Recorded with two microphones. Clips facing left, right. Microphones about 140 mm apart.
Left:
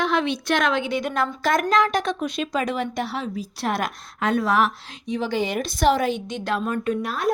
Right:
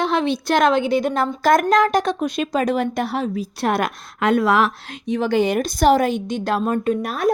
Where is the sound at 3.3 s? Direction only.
60° right (ahead or behind); by 7.0 s 35° right (ahead or behind).